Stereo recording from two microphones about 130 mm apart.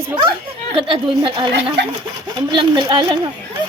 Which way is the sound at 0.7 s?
45° right (ahead or behind).